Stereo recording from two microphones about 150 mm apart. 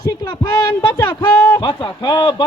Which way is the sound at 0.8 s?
30° left (ahead or behind).